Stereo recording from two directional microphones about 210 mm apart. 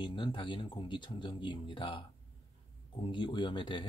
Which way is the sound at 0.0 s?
25° left (ahead or behind).